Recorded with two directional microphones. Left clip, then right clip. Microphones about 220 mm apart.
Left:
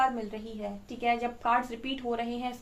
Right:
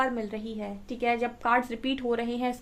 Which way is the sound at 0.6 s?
45° right (ahead or behind).